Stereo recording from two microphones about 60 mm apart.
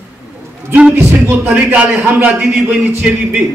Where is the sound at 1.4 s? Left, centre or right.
Right.